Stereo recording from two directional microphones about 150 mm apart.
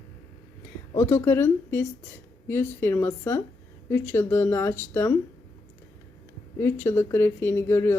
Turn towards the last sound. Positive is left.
turn(degrees=15)  # may be behind; listen again after turning